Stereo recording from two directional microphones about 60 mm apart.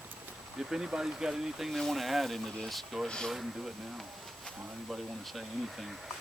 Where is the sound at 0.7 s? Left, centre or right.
Centre.